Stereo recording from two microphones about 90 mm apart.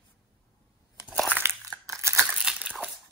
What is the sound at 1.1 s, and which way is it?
Crushing, 10° right (ahead or behind).